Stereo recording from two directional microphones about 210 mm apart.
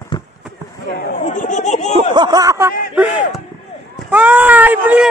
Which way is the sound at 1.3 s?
35° left (ahead or behind).